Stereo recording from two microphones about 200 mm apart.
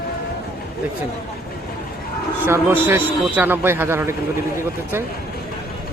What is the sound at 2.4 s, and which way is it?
A man's voice, 10° right (ahead or behind).